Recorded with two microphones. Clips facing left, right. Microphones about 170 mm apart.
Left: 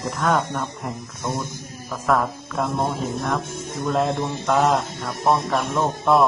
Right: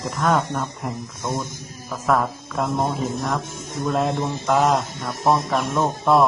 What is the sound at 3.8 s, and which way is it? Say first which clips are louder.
Speech: even; centre (ahead or behind).